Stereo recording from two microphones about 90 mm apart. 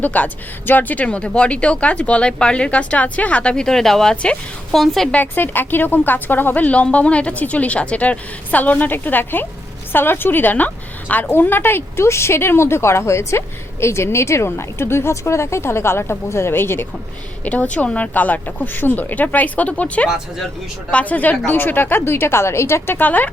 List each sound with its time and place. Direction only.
0.0 s a woman's voice: 20° left (ahead or behind); by 5.0 s centre (ahead or behind)
5.1 s speech: 20° left (ahead or behind)